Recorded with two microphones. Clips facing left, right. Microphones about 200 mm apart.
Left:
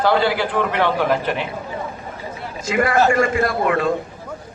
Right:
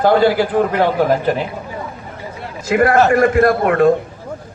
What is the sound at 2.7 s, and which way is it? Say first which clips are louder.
A man's voice: right 4 dB; 60° right (ahead or behind).